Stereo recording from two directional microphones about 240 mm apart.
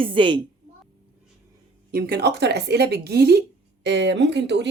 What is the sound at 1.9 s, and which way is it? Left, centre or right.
A woman's voice, right.